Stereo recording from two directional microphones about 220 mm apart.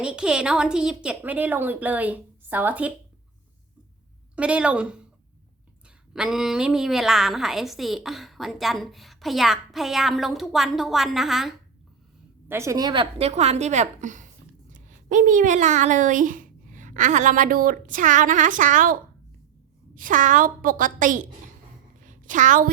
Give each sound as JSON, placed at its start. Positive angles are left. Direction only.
{"t": 0.0, "sound": "a woman's voice", "side_deg": -5}
{"t": 4.4, "sound": "a woman's voice", "side_deg": -5}
{"t": 6.1, "sound": "a woman's voice", "side_deg": 0}
{"t": 12.5, "sound": "a woman's voice", "side_deg": -10}
{"t": 20.0, "sound": "speech", "side_deg": -35}
{"t": 22.0, "sound": "a sound", "side_deg": -35}